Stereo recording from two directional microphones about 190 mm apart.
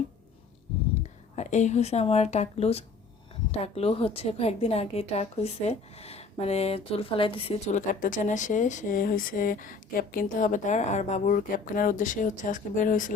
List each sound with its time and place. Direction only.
1.4 s a woman's voice: 40° left (ahead or behind)